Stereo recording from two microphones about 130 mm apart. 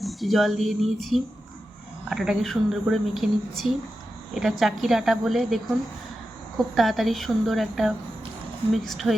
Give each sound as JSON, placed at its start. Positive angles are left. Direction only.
{"t": 0.0, "sound": "speech", "side_deg": 0}
{"t": 6.7, "sound": "speech", "side_deg": 0}